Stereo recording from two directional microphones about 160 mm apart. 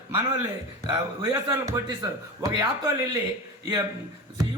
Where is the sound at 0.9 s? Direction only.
25° right (ahead or behind).